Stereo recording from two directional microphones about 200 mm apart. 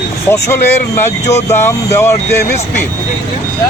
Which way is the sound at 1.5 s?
10° left (ahead or behind).